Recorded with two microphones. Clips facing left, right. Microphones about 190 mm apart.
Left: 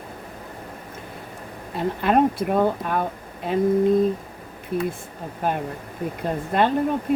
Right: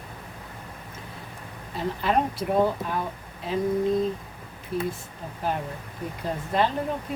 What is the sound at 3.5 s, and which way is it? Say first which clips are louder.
Speech: left 5 dB; 55° left (ahead or behind).